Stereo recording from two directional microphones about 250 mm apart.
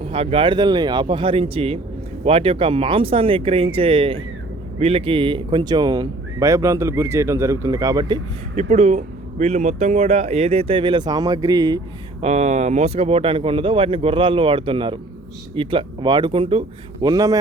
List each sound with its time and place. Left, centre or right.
0.0 s speech: right
8.7 s speech: right
12.2 s speech: right